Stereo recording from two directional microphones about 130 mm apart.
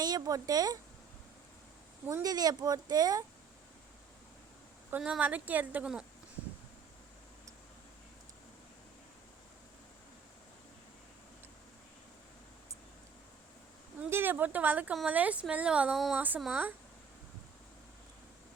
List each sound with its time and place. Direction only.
0.0 s speech: 30° right (ahead or behind)
2.0 s speech: 25° right (ahead or behind)
4.9 s a woman's voice: 10° right (ahead or behind)
14.1 s a woman's voice: 15° right (ahead or behind)